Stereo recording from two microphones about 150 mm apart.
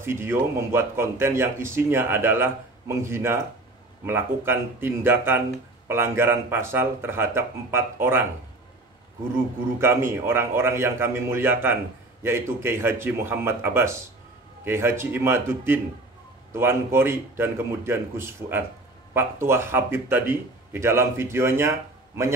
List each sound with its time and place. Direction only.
0.0 s a man's voice: 15° right (ahead or behind)
9.8 s a man's voice: 15° right (ahead or behind)